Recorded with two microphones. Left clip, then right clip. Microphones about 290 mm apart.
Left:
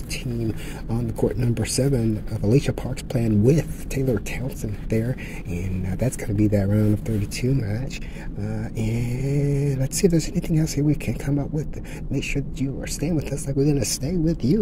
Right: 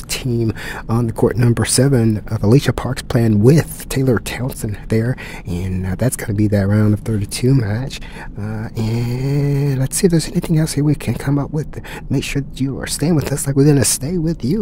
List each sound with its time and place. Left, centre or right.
0.1 s speech: right